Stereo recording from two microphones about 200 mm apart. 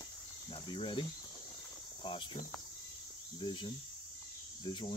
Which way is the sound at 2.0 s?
25° left (ahead or behind).